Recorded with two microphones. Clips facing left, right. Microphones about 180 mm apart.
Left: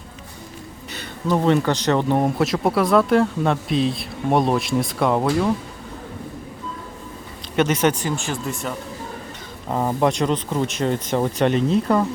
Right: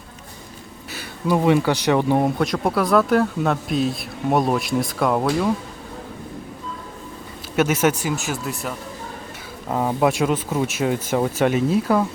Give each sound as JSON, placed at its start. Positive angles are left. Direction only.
{"t": 0.9, "sound": "speech", "side_deg": -10}
{"t": 2.4, "sound": "a man's voice", "side_deg": 0}
{"t": 7.5, "sound": "speech", "side_deg": -5}